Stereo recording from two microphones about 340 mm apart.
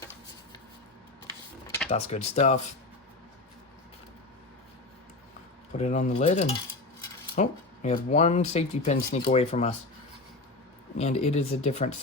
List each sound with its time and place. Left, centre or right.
1.9 s speech: centre
5.7 s speech: centre
10.9 s speech: centre